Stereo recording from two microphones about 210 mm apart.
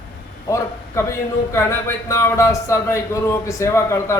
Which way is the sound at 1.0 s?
15° left (ahead or behind).